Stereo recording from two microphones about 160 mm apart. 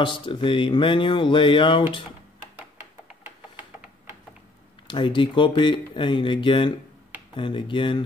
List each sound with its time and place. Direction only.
0.0 s speech: 30° left (ahead or behind)
4.8 s speech: 30° left (ahead or behind)